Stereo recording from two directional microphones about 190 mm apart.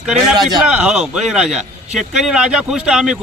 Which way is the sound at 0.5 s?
5° right (ahead or behind).